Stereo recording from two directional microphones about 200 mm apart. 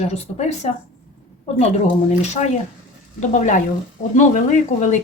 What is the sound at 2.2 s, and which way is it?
Speech, 35° left (ahead or behind).